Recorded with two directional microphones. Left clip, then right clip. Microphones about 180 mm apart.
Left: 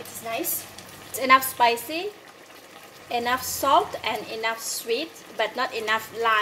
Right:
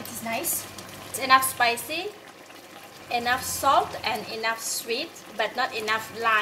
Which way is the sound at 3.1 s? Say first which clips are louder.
Even; 40° left (ahead or behind).